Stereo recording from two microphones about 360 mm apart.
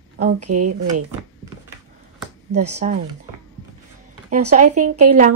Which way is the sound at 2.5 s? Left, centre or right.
Right.